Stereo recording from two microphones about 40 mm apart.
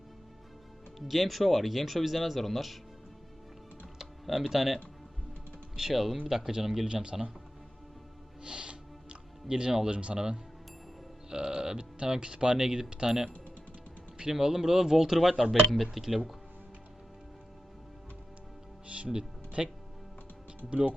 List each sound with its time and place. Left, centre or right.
0.9 s speech: centre
3.9 s typing: centre
5.9 s speech: centre
6.8 s speech: right
8.4 s music: right
10.2 s speech: centre
19.0 s music: right
20.7 s speech: right